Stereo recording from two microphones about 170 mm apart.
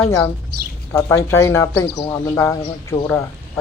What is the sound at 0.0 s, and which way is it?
Speech, 15° left (ahead or behind).